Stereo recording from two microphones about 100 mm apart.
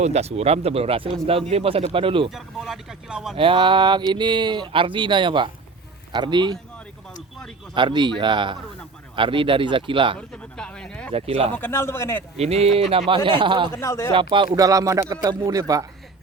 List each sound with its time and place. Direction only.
0.1 s speech: 90° right; by 1.1 s 70° right (ahead or behind)
1.3 s speech: 80° right; by 2.3 s 60° right (ahead or behind)
2.3 s speech: 5° right (ahead or behind)
3.3 s speech: 60° right (ahead or behind)
7.7 s speech: 50° right (ahead or behind)
10.2 s speech: 10° left (ahead or behind)
11.1 s speech: 90° right
11.5 s a man's voice: 20° left (ahead or behind)
12.4 s speech: 90° right; by 13.7 s 55° right (ahead or behind)
13.7 s a man's voice: 25° left (ahead or behind)
14.1 s speech: 60° right (ahead or behind)
14.5 s speech: 35° right (ahead or behind)